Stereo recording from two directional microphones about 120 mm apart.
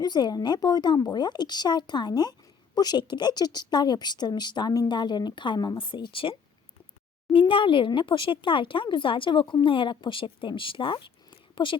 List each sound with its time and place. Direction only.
0.0 s speech: 35° left (ahead or behind)
7.3 s speech: 45° left (ahead or behind)